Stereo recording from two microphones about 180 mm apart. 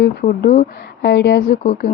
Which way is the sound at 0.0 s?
55° left (ahead or behind).